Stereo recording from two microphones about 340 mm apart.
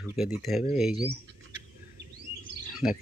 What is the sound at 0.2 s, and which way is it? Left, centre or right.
Speech, centre.